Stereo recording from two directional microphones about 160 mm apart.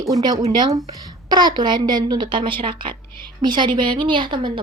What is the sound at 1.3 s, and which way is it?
A woman's voice, 25° right (ahead or behind).